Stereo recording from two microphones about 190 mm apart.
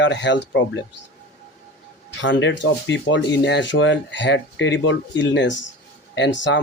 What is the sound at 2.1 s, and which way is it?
Speech, 75° left (ahead or behind).